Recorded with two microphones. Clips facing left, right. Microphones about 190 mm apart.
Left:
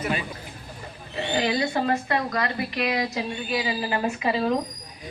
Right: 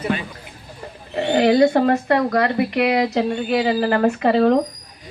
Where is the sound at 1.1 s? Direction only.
60° right (ahead or behind).